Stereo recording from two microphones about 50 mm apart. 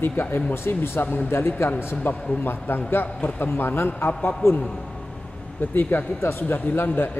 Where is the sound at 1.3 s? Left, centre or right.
Left.